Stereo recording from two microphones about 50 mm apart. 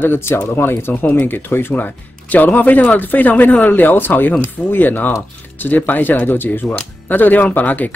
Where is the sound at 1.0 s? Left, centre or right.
Left.